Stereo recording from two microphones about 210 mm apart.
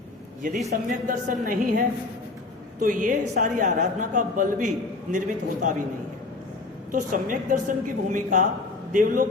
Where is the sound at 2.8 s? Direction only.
40° right (ahead or behind).